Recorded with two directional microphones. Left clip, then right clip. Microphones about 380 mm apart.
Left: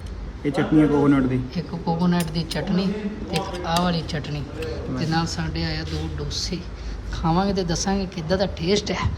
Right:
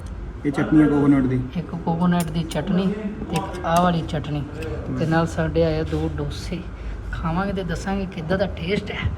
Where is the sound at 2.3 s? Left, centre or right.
Left.